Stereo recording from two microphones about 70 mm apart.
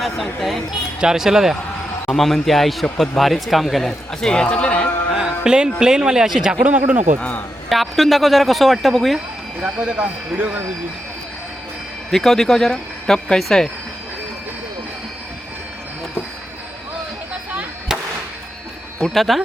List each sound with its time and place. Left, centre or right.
0.0 s a man's voice: centre
5.1 s music: centre
5.8 s speech: centre
6.7 s speech: right
7.2 s speech: centre
7.7 s a man's voice: centre
9.6 s speech: centre
12.1 s a man's voice: centre
18.9 s speech: centre